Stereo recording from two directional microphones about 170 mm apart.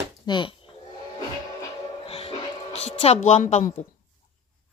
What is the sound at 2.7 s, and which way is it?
Speech, 40° left (ahead or behind).